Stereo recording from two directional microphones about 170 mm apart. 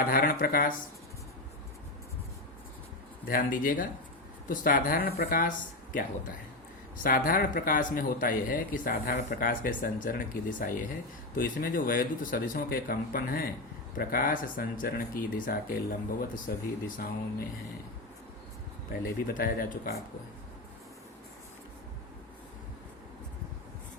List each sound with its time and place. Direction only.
0.1 s speech: 55° left (ahead or behind)
3.2 s speech: 55° left (ahead or behind)
19.0 s speech: 60° left (ahead or behind)